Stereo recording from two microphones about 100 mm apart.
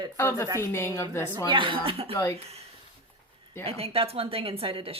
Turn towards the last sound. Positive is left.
turn(degrees=-70)  # may be behind; listen again after turning